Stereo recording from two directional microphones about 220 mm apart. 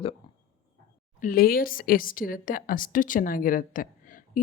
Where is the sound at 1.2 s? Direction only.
40° left (ahead or behind).